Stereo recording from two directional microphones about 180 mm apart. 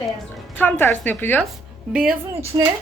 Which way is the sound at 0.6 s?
10° left (ahead or behind).